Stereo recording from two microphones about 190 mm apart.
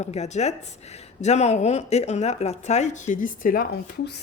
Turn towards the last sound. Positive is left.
turn(degrees=55)  # may be behind; listen again after turning